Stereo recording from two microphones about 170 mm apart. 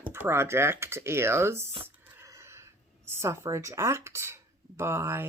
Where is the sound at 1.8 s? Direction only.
15° right (ahead or behind).